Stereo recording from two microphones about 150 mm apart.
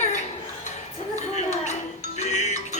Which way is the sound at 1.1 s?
50° left (ahead or behind).